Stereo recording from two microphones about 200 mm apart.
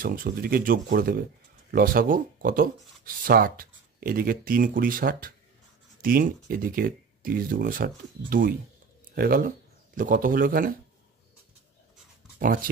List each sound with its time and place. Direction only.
0.0 s speech: 45° right (ahead or behind)